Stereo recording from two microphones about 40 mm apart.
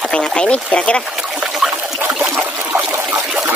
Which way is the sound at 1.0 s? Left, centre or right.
Centre.